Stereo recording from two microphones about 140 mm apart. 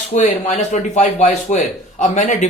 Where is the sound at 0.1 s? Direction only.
55° left (ahead or behind).